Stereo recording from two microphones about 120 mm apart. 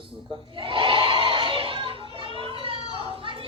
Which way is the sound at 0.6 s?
45° right (ahead or behind).